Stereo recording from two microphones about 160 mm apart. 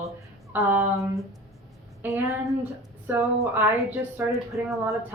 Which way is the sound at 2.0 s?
15° right (ahead or behind).